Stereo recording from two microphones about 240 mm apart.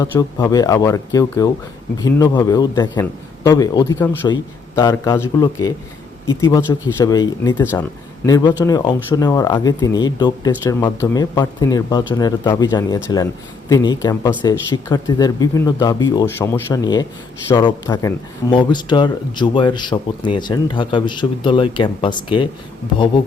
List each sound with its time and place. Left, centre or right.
0.0 s speech: centre